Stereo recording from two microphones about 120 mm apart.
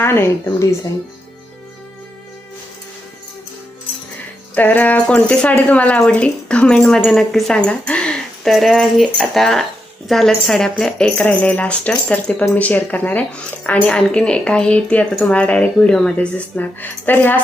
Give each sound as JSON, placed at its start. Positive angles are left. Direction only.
{"t": 0.0, "sound": "a woman's voice", "side_deg": 20}
{"t": 4.5, "sound": "speech", "side_deg": 15}